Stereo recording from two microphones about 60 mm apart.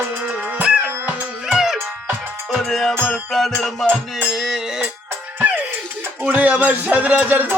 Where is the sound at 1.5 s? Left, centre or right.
Centre.